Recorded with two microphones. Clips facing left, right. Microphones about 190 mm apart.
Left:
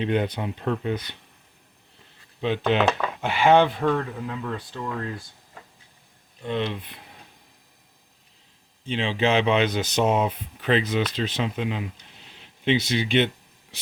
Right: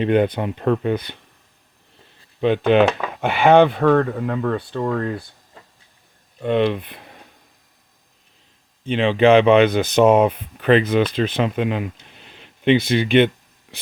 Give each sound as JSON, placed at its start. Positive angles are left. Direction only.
{"t": 0.0, "sound": "speech", "side_deg": -55}
{"t": 2.4, "sound": "speech", "side_deg": -55}
{"t": 6.4, "sound": "speech", "side_deg": -60}
{"t": 8.9, "sound": "speech", "side_deg": -60}